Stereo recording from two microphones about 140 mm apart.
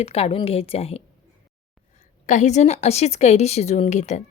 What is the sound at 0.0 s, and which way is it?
A woman's voice, 45° left (ahead or behind).